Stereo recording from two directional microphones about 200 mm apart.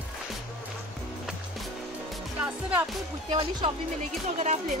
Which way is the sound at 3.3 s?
30° right (ahead or behind).